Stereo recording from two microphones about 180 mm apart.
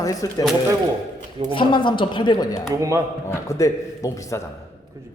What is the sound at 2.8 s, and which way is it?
Speech, 15° right (ahead or behind).